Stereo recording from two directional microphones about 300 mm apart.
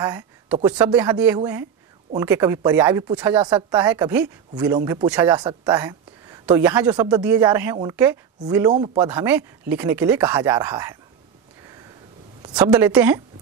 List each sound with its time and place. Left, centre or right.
0.0 s a woman's voice: centre
12.4 s a sound: centre
12.7 s a woman's voice: centre